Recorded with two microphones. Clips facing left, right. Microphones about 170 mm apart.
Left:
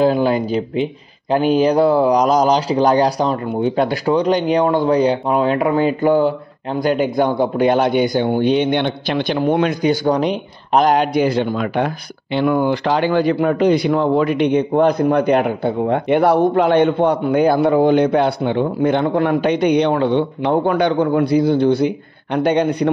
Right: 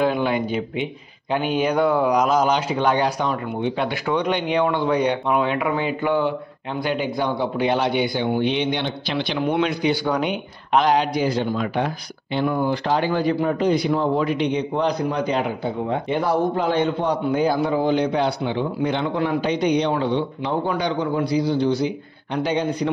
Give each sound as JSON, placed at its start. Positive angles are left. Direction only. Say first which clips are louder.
{"t": 0.0, "sound": "a man's voice", "louder": "left 5 dB", "side_deg": 35}